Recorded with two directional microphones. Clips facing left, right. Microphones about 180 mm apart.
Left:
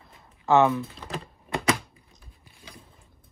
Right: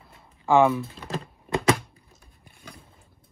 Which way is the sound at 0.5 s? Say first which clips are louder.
Right 1 dB; 10° right (ahead or behind).